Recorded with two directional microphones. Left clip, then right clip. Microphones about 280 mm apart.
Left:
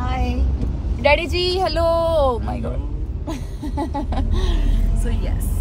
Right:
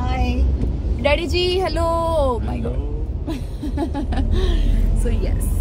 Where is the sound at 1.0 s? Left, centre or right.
Left.